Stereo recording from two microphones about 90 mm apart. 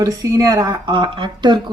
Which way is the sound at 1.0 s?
65° right (ahead or behind).